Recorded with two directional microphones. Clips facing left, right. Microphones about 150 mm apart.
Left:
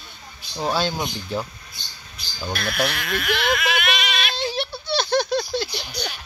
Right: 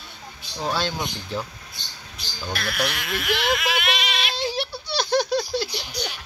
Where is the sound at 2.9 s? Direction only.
20° right (ahead or behind).